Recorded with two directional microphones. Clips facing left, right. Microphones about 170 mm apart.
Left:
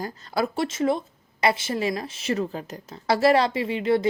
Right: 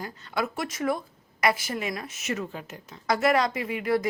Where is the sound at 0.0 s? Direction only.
35° left (ahead or behind).